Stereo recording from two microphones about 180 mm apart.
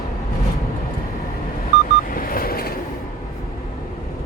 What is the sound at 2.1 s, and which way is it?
Vehicle, 50° left (ahead or behind).